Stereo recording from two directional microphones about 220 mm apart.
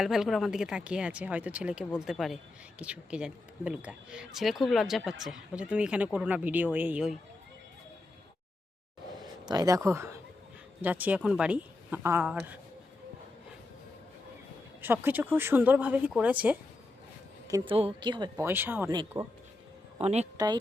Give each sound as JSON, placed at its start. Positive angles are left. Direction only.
{"t": 0.0, "sound": "a woman's voice", "side_deg": 0}
{"t": 9.5, "sound": "a woman's voice", "side_deg": -15}
{"t": 15.0, "sound": "a woman's voice", "side_deg": -10}
{"t": 17.5, "sound": "a woman's voice", "side_deg": -25}
{"t": 20.0, "sound": "speech", "side_deg": -30}
{"t": 20.3, "sound": "speech", "side_deg": -20}